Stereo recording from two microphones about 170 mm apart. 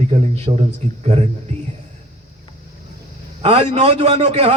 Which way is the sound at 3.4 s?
35° right (ahead or behind).